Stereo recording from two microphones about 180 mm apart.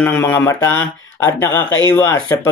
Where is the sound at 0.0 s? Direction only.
10° left (ahead or behind).